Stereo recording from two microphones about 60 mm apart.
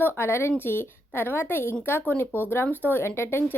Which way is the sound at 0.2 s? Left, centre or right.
Left.